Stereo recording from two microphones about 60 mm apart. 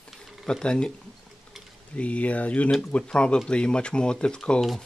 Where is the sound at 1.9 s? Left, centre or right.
Left.